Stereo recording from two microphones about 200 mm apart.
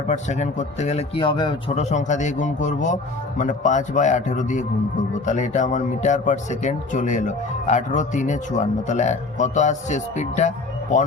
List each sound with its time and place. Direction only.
0.1 s speech: 35° left (ahead or behind)